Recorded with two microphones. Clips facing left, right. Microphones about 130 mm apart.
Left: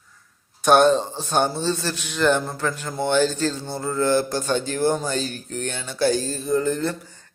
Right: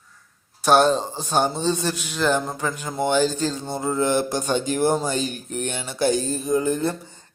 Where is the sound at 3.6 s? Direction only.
20° right (ahead or behind).